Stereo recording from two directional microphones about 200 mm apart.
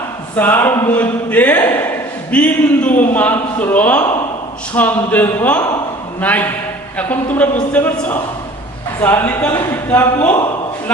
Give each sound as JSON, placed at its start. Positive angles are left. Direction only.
{"t": 0.3, "sound": "a man's voice", "side_deg": 10}